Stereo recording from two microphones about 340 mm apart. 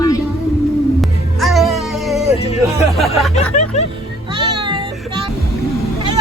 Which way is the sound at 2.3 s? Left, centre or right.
Centre.